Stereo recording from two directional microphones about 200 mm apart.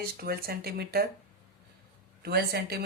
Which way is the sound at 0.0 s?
50° right (ahead or behind).